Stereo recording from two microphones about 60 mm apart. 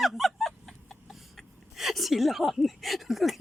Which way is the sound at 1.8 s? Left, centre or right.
Centre.